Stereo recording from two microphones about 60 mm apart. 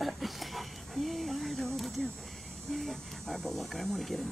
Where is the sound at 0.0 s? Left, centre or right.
Centre.